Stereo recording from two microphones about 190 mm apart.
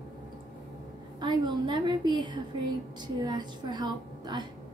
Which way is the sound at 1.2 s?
25° right (ahead or behind).